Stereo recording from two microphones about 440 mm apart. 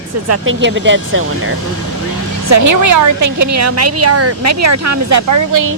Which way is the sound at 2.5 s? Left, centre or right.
Right.